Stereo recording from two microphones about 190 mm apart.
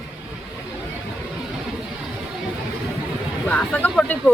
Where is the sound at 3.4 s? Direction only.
10° left (ahead or behind).